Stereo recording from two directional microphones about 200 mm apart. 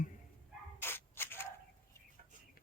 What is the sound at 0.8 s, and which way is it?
Dog, 10° left (ahead or behind).